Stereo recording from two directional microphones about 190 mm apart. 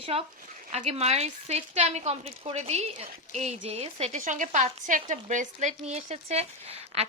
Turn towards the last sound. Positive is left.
turn(degrees=-35)  # may be behind; listen again after turning